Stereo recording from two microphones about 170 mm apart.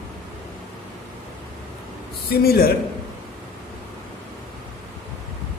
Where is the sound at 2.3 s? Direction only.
65° left (ahead or behind).